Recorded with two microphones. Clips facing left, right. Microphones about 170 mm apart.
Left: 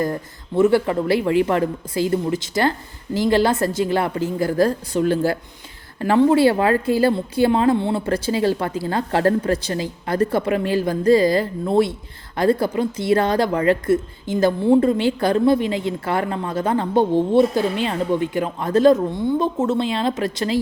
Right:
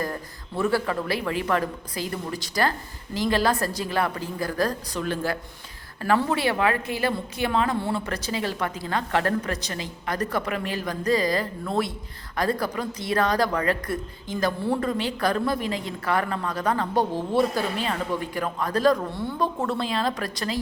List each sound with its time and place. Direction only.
0.0 s speech: 20° left (ahead or behind)